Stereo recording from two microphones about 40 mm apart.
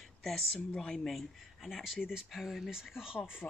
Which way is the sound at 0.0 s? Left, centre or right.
Centre.